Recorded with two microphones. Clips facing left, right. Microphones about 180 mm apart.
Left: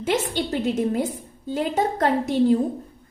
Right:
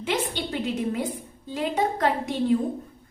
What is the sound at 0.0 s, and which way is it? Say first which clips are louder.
A woman's voice: left 4 dB; 45° left (ahead or behind).